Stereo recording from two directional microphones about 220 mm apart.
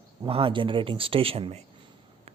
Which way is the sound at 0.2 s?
25° right (ahead or behind).